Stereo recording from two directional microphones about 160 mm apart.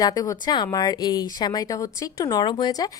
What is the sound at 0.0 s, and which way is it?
Speech, 25° left (ahead or behind).